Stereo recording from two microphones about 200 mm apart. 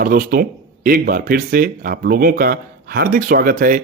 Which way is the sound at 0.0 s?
45° right (ahead or behind).